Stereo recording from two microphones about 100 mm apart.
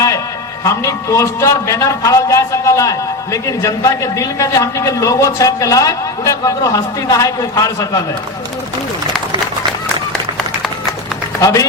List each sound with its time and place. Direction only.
0.6 s a man's voice: 30° left (ahead or behind)
11.3 s a man's voice: 35° left (ahead or behind)